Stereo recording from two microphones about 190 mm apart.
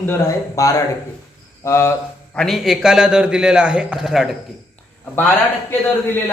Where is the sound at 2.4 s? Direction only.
Centre (ahead or behind).